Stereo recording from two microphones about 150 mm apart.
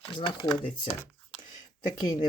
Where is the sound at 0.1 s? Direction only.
30° left (ahead or behind).